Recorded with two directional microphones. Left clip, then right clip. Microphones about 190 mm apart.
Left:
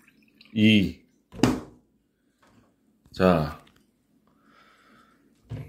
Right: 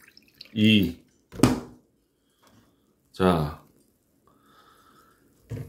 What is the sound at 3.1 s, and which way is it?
Speech, 5° left (ahead or behind).